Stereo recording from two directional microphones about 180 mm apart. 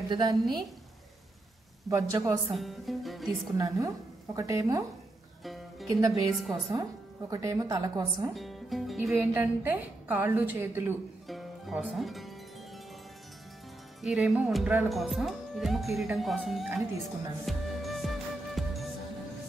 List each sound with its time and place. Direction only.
0.1 s a woman's voice: 20° right (ahead or behind)
1.9 s a woman's voice: 20° right (ahead or behind)
2.5 s speech: centre (ahead or behind)
3.5 s a woman's voice: 20° right (ahead or behind)
5.4 s music: centre (ahead or behind)
5.9 s a woman's voice: 20° right (ahead or behind)
6.3 s speech: centre (ahead or behind)
6.7 s a woman's voice: 20° right (ahead or behind)
8.3 s music: centre (ahead or behind)
9.1 s a woman's voice: 10° right (ahead or behind)
11.2 s music: centre (ahead or behind)
14.0 s speech: centre (ahead or behind)
17.5 s music: centre (ahead or behind)